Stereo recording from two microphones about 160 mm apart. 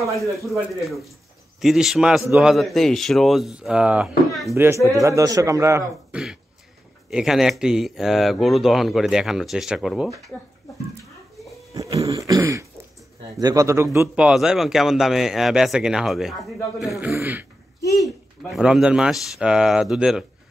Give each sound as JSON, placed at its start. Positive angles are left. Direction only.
{"t": 0.0, "sound": "speech", "side_deg": 0}
{"t": 4.6, "sound": "a man's voice", "side_deg": -15}
{"t": 6.1, "sound": "speech", "side_deg": -10}
{"t": 11.8, "sound": "throat clearing", "side_deg": -20}
{"t": 13.4, "sound": "speech", "side_deg": -20}
{"t": 17.1, "sound": "speech", "side_deg": -10}
{"t": 17.8, "sound": "speech", "side_deg": 20}
{"t": 18.4, "sound": "speech", "side_deg": 0}